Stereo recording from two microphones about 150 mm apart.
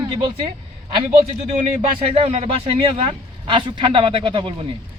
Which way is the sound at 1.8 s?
40° right (ahead or behind).